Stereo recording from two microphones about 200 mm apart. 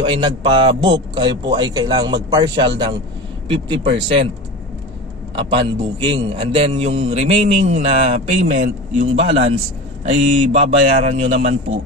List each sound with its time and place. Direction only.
0.0 s a man's voice: 25° right (ahead or behind)
5.3 s a man's voice: 25° right (ahead or behind)
10.5 s speech: 30° right (ahead or behind)